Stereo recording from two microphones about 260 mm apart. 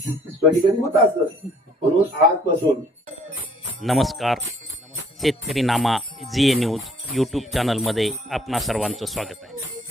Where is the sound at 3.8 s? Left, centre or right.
Centre.